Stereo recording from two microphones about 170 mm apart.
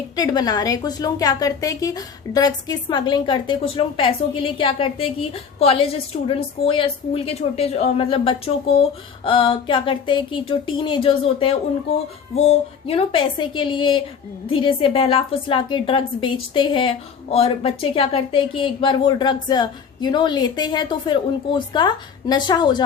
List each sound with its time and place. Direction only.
0.2 s a woman's voice: 25° left (ahead or behind)